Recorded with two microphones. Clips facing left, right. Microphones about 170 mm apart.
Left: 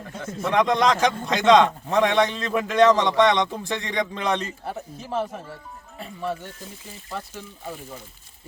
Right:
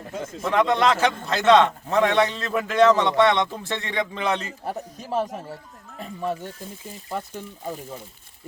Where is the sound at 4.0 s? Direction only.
5° right (ahead or behind).